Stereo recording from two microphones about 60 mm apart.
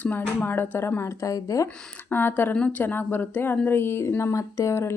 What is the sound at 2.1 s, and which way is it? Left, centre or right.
Speech, left.